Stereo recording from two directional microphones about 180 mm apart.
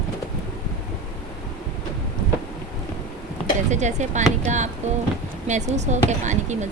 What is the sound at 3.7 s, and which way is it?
Speech, 40° right (ahead or behind).